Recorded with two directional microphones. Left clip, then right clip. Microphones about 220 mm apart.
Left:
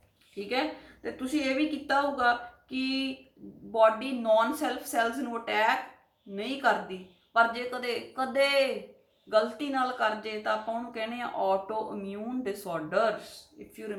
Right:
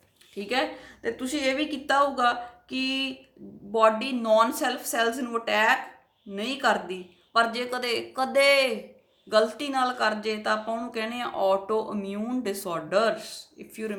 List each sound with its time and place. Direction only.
0.3 s speech: 45° right (ahead or behind)